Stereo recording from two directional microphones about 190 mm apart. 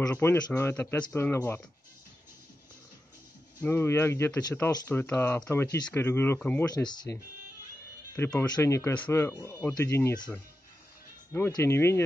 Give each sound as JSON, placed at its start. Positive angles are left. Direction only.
{"t": 0.1, "sound": "speech", "side_deg": 10}
{"t": 3.6, "sound": "speech", "side_deg": 15}
{"t": 6.7, "sound": "speech", "side_deg": 25}
{"t": 8.5, "sound": "speech", "side_deg": 15}